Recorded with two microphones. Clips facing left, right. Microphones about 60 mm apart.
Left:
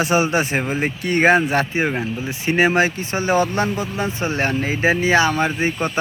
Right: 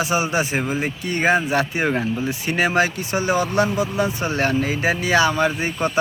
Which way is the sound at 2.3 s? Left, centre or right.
Left.